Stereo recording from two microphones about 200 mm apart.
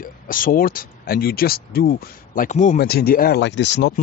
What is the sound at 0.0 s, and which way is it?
Speech, 45° left (ahead or behind).